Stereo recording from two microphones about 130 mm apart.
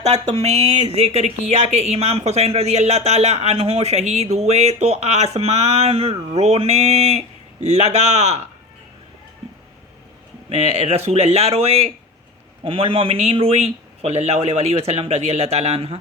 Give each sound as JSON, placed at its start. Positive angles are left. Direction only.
{"t": 0.0, "sound": "speech", "side_deg": -60}
{"t": 10.5, "sound": "speech", "side_deg": -55}